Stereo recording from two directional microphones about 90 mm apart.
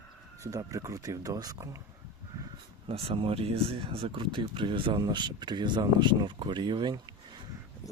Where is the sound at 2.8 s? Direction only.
80° right; by 5.0 s 65° right (ahead or behind).